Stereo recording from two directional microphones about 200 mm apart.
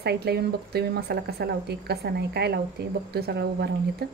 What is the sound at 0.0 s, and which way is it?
Speech, 55° right (ahead or behind).